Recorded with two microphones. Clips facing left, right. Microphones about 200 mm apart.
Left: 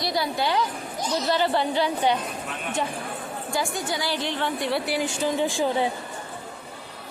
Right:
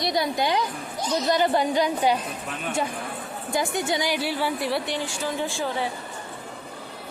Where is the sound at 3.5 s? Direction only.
20° right (ahead or behind); by 4.8 s 5° right (ahead or behind).